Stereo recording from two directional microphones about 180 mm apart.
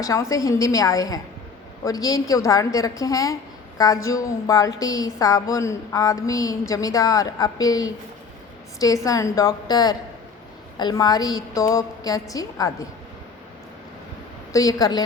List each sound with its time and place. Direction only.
0.0 s a woman's voice: 15° left (ahead or behind)
14.5 s a woman's voice: 20° left (ahead or behind)